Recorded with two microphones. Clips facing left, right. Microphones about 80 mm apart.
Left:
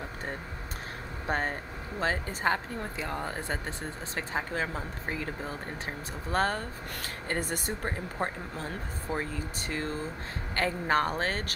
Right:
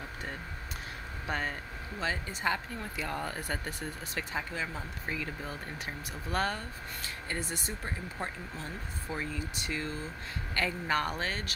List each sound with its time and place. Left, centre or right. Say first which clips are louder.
1.2 s a woman's voice: left 4 dB; left
7.0 s a woman's voice: left 5 dB; left